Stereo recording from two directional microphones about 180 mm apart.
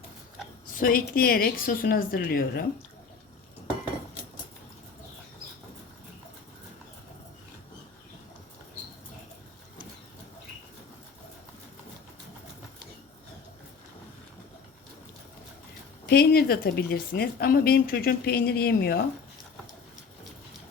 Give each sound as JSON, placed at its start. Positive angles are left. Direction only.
{"t": 0.8, "sound": "a woman's voice", "side_deg": 50}
{"t": 16.0, "sound": "a woman's voice", "side_deg": 60}